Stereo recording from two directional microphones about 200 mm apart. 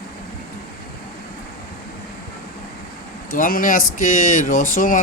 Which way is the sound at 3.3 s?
45° left (ahead or behind).